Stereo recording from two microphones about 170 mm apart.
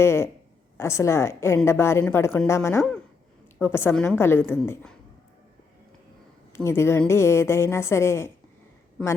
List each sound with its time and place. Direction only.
0.0 s speech: 15° left (ahead or behind)
6.5 s a woman's voice: 15° left (ahead or behind)